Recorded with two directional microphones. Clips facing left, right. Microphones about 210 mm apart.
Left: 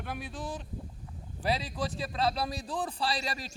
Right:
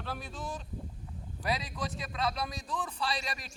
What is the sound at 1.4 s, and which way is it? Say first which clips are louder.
A man's voice: left 3 dB; 30° left (ahead or behind).